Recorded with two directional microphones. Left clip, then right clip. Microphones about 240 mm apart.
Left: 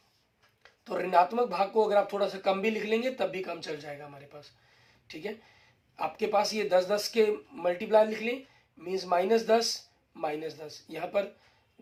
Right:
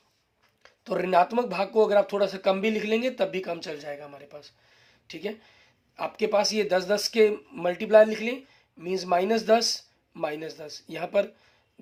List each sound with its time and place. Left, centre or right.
0.6 s speech: right